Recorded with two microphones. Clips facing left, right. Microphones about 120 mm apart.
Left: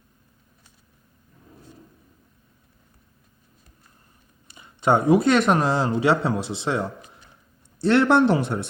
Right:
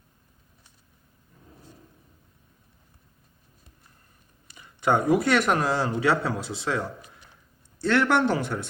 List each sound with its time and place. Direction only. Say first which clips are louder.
4.5 s speech: left 3 dB; 25° left (ahead or behind)